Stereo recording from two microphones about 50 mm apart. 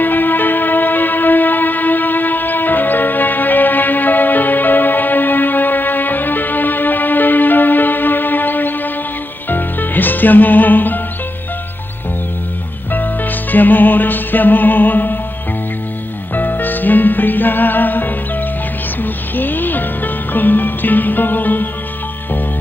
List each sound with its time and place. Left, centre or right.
0.0 s music: left
12.9 s music: left
16.3 s music: left